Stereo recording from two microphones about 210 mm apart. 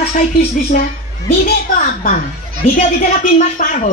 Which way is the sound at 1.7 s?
35° left (ahead or behind).